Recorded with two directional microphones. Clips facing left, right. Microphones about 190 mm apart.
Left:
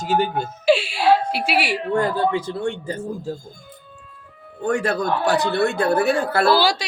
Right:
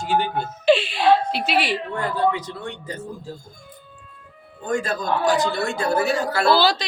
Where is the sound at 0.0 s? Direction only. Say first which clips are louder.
Left 2 dB; 40° left (ahead or behind).